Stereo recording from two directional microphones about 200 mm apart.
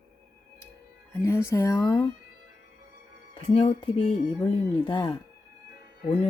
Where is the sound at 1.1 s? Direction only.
15° left (ahead or behind).